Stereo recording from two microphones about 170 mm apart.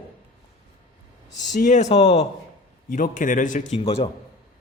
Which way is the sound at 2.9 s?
50° left (ahead or behind).